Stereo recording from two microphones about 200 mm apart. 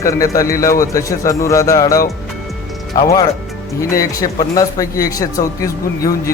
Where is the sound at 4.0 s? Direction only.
15° left (ahead or behind).